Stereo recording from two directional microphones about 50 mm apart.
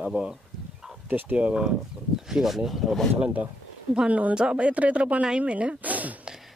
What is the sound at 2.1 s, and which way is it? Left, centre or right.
Speech, centre.